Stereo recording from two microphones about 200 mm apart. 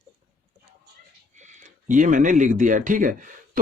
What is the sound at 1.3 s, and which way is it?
Speech, 35° right (ahead or behind).